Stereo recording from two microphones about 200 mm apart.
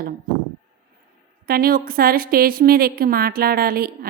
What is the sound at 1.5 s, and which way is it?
A woman's voice, 50° right (ahead or behind).